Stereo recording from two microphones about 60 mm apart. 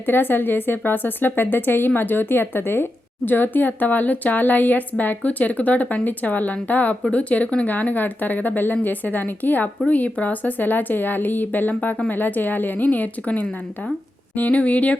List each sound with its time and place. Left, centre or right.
0.0 s a woman's voice: left